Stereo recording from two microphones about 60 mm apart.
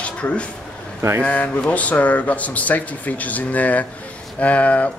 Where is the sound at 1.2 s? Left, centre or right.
Left.